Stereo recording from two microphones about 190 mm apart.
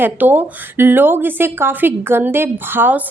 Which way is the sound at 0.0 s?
10° right (ahead or behind).